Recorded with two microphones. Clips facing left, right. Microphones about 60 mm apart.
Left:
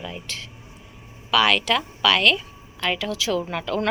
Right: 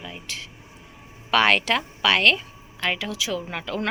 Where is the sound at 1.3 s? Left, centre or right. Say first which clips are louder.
Even; right; by 3.9 s centre.